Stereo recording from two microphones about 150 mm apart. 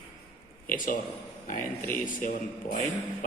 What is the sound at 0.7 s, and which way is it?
Speech, 65° left (ahead or behind).